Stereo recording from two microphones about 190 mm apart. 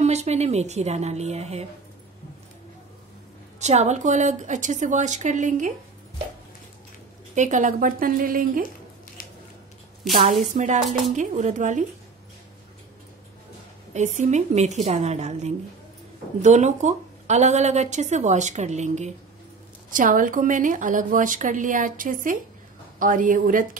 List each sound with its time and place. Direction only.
0.0 s speech: 35° right (ahead or behind)
3.5 s speech: 35° right (ahead or behind)
7.3 s a woman's voice: 40° right (ahead or behind)
10.5 s speech: 40° right (ahead or behind)
13.9 s a woman's voice: 40° right (ahead or behind)